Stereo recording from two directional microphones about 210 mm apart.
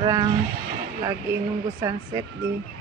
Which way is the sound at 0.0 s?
15° right (ahead or behind).